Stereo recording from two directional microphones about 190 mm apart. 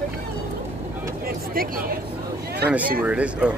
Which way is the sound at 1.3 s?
50° right (ahead or behind).